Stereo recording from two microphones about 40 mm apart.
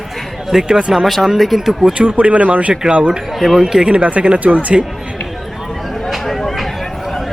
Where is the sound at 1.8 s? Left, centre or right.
Right.